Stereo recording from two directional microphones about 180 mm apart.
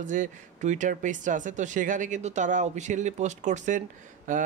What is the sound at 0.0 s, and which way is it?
Speech, 45° right (ahead or behind).